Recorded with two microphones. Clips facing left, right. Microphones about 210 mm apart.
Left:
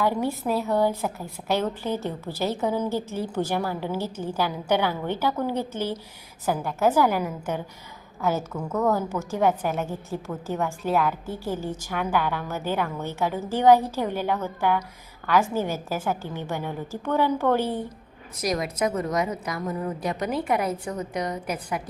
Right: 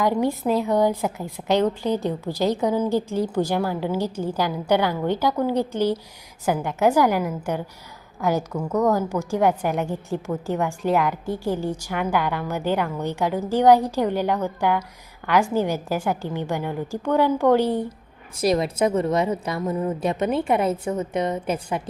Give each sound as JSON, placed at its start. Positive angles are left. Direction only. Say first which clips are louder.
{"t": 0.0, "sound": "a woman's voice", "louder": "right 3 dB", "side_deg": -15}
{"t": 18.3, "sound": "a woman's voice", "louder": "right 6 dB", "side_deg": -30}